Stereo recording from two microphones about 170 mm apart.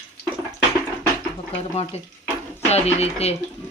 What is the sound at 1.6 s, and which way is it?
Speech, 40° left (ahead or behind).